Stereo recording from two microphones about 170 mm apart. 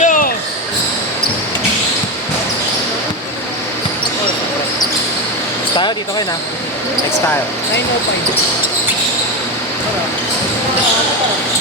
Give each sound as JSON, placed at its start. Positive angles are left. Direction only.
{"t": 0.0, "sound": "basketball bounce", "side_deg": 50}
{"t": 5.7, "sound": "basketball bounce", "side_deg": 25}